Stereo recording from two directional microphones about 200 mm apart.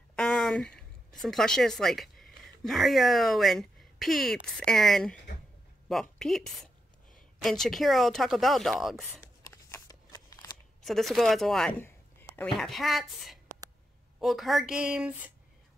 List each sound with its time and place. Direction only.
0.1 s speech: centre (ahead or behind)
9.5 s shuffling cards: 15° left (ahead or behind)
10.8 s speech: centre (ahead or behind)